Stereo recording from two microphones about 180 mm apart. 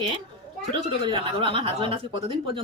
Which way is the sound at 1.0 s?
25° right (ahead or behind).